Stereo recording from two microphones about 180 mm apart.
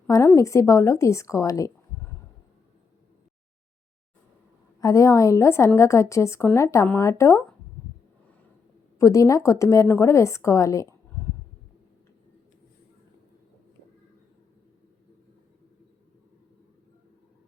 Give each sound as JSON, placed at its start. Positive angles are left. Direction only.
{"t": 0.1, "sound": "a woman's voice", "side_deg": 15}
{"t": 4.8, "sound": "a woman's voice", "side_deg": 20}
{"t": 9.0, "sound": "a woman's voice", "side_deg": 15}